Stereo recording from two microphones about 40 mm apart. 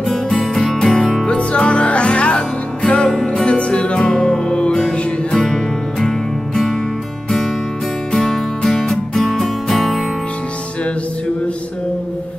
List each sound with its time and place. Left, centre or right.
0.0 s music: centre